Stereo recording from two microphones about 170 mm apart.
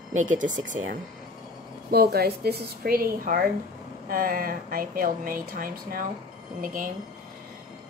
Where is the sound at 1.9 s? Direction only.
70° right (ahead or behind).